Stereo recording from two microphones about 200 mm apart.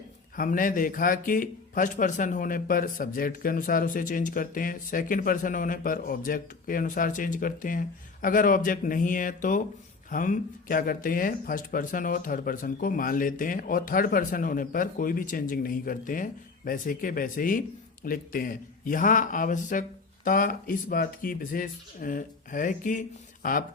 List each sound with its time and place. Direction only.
0.3 s speech: 45° left (ahead or behind)